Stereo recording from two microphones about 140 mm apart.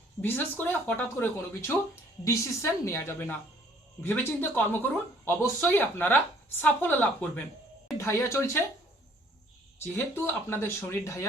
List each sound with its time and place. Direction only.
0.2 s a woman's voice: 15° left (ahead or behind)
9.7 s speech: 15° left (ahead or behind)